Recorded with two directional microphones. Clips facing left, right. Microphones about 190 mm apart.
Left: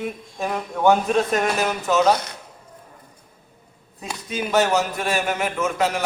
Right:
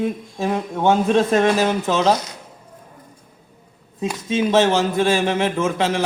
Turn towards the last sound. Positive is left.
turn(degrees=-30)  # may be behind; listen again after turning